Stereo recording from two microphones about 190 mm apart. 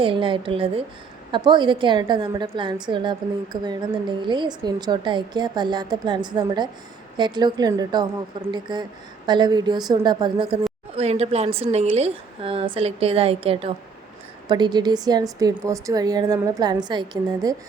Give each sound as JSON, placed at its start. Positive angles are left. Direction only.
{"t": 0.0, "sound": "a woman's voice", "side_deg": -25}